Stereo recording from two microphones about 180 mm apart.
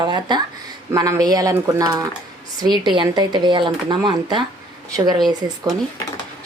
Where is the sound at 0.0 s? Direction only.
25° right (ahead or behind).